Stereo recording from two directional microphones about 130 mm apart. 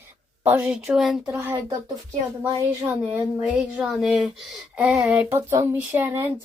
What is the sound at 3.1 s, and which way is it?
Speech, 5° right (ahead or behind).